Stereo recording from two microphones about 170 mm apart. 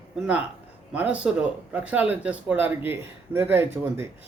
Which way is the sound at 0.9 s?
10° right (ahead or behind).